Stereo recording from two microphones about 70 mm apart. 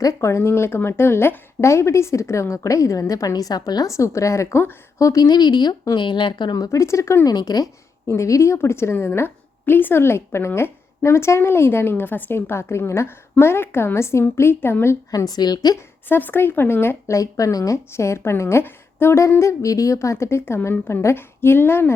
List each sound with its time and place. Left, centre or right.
0.0 s a woman's voice: left
3.8 s a woman's voice: left
6.7 s a woman's voice: left
7.3 s a woman's voice: left
8.0 s a woman's voice: left
15.1 s a woman's voice: left
16.0 s a woman's voice: left
17.1 s a woman's voice: left
17.9 s a woman's voice: left